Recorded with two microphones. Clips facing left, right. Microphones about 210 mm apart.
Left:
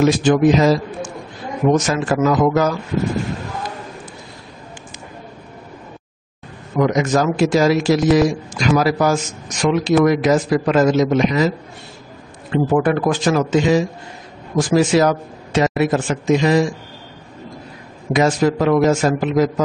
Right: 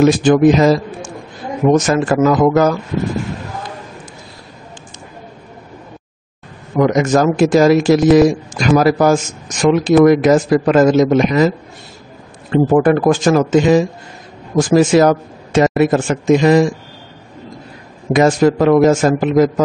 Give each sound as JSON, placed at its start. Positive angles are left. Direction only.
{"t": 0.0, "sound": "a man's voice", "side_deg": -50}
{"t": 6.8, "sound": "a man's voice", "side_deg": -50}
{"t": 12.7, "sound": "a man's voice", "side_deg": -45}
{"t": 18.1, "sound": "a man's voice", "side_deg": -50}